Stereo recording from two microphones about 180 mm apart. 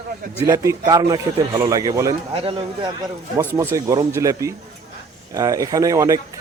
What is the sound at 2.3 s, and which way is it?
Speech, 30° right (ahead or behind).